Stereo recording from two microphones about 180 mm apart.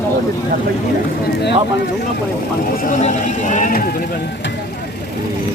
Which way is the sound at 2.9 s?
45° left (ahead or behind).